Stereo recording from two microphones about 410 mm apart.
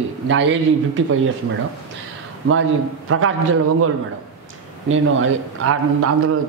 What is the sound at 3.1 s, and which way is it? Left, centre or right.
Speech, right.